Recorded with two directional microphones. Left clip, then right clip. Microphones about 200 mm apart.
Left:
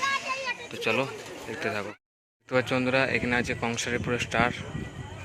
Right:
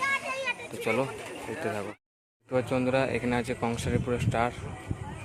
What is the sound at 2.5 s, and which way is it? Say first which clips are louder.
Speech: left 2 dB; centre (ahead or behind).